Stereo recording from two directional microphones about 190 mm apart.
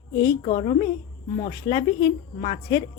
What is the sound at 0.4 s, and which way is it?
Speech, 35° left (ahead or behind).